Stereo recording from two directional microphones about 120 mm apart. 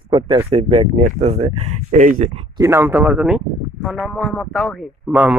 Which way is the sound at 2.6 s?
25° right (ahead or behind).